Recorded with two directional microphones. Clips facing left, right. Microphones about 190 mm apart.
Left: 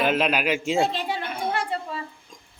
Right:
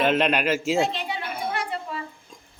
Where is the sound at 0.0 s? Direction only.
Centre (ahead or behind).